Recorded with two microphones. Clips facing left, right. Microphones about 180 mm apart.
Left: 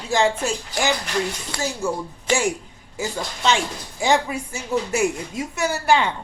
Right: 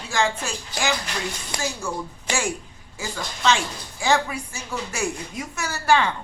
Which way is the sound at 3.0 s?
20° left (ahead or behind).